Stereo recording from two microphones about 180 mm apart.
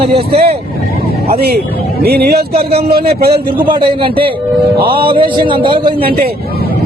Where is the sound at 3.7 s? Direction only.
25° right (ahead or behind).